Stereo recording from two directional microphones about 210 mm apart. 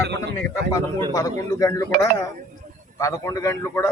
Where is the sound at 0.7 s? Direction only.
15° left (ahead or behind).